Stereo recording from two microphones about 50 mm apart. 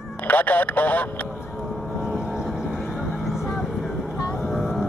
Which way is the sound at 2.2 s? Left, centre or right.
Centre.